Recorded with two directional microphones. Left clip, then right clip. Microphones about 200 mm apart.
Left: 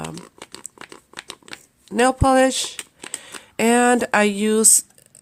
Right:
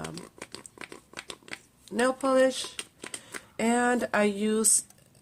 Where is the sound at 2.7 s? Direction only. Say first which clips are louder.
Left 5 dB; 10° left (ahead or behind).